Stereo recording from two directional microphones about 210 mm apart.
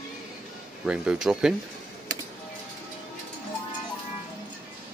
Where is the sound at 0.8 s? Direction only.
5° right (ahead or behind).